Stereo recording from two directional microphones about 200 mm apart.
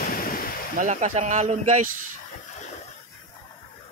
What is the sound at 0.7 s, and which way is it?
Speech, 35° right (ahead or behind).